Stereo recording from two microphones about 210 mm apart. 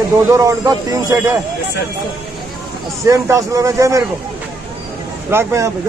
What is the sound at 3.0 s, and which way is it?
Speech, 15° right (ahead or behind).